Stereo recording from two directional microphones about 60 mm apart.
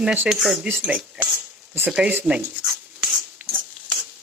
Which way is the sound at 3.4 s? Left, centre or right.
Right.